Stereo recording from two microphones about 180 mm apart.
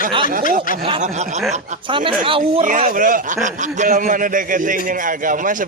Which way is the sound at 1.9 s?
30° right (ahead or behind).